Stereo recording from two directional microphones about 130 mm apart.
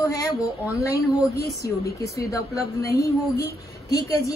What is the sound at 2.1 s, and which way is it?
A woman's voice, 25° left (ahead or behind).